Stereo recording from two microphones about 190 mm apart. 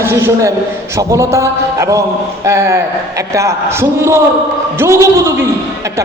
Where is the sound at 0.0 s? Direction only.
15° right (ahead or behind).